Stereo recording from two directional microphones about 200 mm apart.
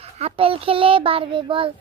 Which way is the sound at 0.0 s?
30° right (ahead or behind).